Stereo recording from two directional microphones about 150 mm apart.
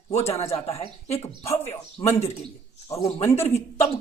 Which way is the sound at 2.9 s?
45° left (ahead or behind).